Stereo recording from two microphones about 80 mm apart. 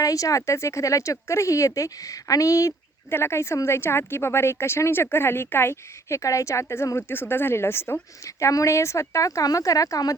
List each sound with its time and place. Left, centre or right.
0.0 s speech: left
3.1 s speech: left